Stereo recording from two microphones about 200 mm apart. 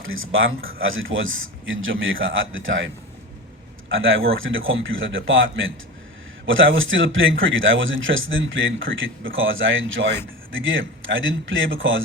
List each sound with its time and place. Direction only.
0.0 s a man's voice: 85° right